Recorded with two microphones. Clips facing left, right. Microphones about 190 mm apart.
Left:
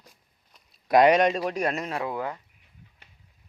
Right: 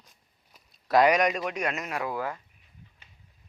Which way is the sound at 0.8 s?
20° left (ahead or behind).